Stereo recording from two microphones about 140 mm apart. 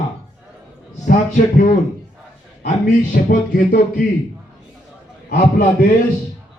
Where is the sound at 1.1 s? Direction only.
60° left (ahead or behind).